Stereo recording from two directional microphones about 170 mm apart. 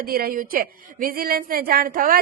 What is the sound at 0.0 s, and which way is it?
A woman's voice, 60° right (ahead or behind).